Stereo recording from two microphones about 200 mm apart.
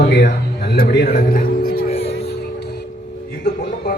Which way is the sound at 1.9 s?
30° left (ahead or behind).